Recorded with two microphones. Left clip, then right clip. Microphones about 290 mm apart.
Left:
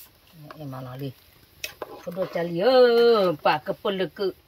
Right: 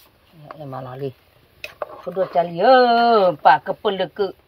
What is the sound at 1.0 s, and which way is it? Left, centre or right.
Speech, right.